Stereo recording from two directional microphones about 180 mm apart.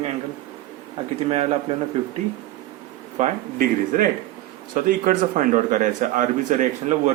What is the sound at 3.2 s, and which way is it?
A man's voice, 50° right (ahead or behind).